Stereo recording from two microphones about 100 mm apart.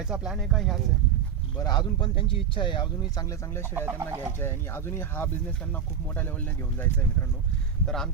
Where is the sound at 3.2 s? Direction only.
30° left (ahead or behind).